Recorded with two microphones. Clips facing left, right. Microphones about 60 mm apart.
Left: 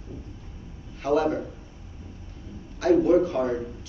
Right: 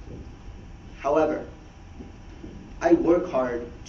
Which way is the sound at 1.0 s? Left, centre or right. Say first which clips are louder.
Right 2 dB; right.